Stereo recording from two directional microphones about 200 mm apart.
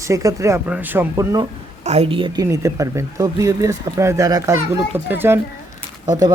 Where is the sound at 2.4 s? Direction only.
15° right (ahead or behind).